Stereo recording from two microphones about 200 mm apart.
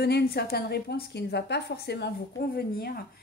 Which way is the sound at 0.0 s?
55° left (ahead or behind).